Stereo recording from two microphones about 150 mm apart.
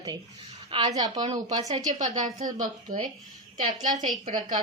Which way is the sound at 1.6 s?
50° right (ahead or behind).